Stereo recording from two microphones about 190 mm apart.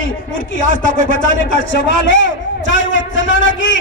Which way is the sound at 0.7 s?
90° left.